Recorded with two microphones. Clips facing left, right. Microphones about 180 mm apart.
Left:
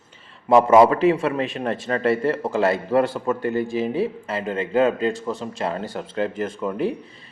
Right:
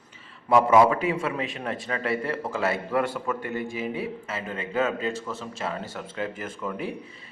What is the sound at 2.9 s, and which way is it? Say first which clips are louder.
A man's voice: left 6 dB; 30° left (ahead or behind).